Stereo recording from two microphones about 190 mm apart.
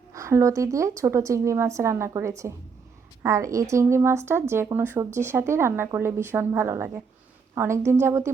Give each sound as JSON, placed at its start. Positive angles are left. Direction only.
{"t": 0.1, "sound": "a woman's voice", "side_deg": -15}